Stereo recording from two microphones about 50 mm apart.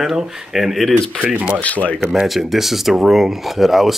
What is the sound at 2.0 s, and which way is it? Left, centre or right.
Speech, centre.